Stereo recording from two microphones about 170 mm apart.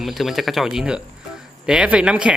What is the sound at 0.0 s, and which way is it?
A man's voice, centre (ahead or behind).